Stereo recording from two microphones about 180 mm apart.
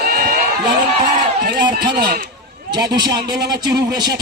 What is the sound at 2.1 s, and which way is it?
Speech, 55° right (ahead or behind).